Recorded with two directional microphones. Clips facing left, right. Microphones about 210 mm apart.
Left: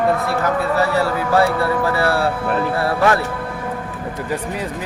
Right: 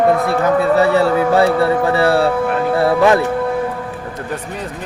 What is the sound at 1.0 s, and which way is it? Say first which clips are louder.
Speech: right 4 dB; 25° right (ahead or behind).